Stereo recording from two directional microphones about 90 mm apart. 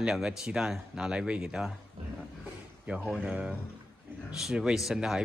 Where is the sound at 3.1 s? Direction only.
10° right (ahead or behind).